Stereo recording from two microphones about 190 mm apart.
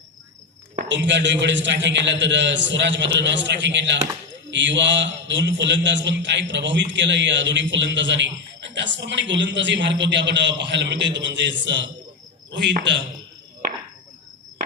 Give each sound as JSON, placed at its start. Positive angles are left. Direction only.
{"t": 0.9, "sound": "a man's voice", "side_deg": -70}